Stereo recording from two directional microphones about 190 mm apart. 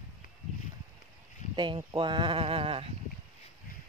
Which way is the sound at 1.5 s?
25° right (ahead or behind).